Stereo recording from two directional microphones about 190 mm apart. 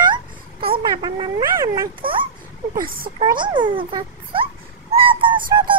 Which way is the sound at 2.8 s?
50° right (ahead or behind).